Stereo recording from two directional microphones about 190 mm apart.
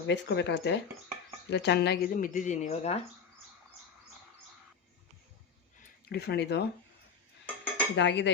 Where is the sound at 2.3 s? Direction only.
40° left (ahead or behind).